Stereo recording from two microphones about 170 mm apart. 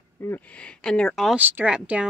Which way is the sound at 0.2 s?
10° left (ahead or behind).